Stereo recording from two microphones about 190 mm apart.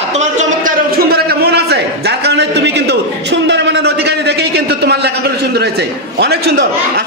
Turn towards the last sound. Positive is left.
turn(degrees=-55)  # may be behind; listen again after turning